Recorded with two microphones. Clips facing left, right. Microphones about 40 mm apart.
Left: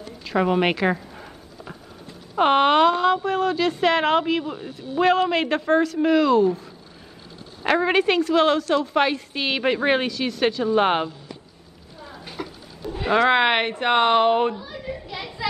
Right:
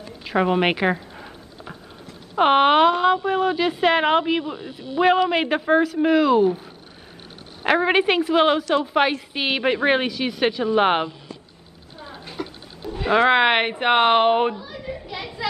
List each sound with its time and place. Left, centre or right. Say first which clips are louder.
0.2 s a woman's voice: right 1 dB; centre
1.1 s a sound: right 1 dB; right
2.3 s speech: right 1 dB; centre
7.6 s speech: right 1 dB; centre
12.4 s a sound: right 2 dB; centre
12.9 s cat: right 1 dB; centre
13.3 s speech: right 1 dB; centre
14.6 s children playing: even; centre